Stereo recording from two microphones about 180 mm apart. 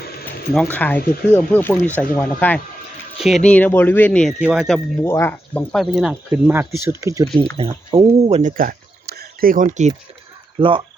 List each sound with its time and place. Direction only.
0.6 s speech: 10° left (ahead or behind)
5.0 s speech: 15° left (ahead or behind)
5.7 s speech: centre (ahead or behind); by 7.3 s 15° right (ahead or behind)
7.5 s speech: 30° right (ahead or behind)
10.6 s speech: 30° right (ahead or behind)